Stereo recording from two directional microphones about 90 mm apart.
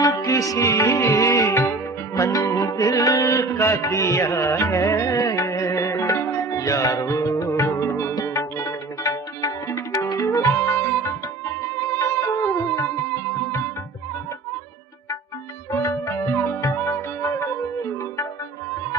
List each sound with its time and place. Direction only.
0.0 s music: 40° left (ahead or behind)
10.1 s music: 45° left (ahead or behind)
10.4 s music: 25° left (ahead or behind)
15.7 s music: 35° left (ahead or behind)